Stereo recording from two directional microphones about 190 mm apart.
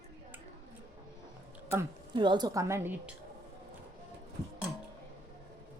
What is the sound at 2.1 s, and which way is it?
A woman's voice, 25° right (ahead or behind).